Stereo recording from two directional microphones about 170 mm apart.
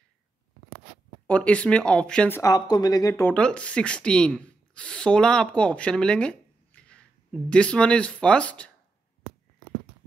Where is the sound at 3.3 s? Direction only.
5° left (ahead or behind).